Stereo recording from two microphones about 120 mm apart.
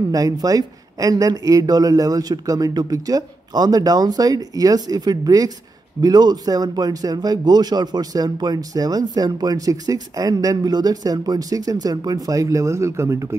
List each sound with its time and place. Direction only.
0.1 s speech: 30° right (ahead or behind)